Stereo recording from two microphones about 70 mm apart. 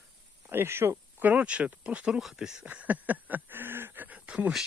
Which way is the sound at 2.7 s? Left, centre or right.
Right.